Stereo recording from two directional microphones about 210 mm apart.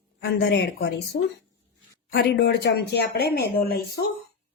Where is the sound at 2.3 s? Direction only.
50° left (ahead or behind).